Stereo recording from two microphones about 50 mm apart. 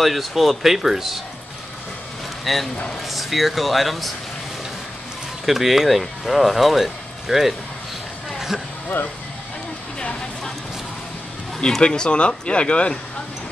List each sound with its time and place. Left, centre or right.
0.0 s speech: centre
2.4 s speech: centre
5.4 s speech: centre
8.3 s a sound: centre
8.8 s speech: left
11.8 s speech: centre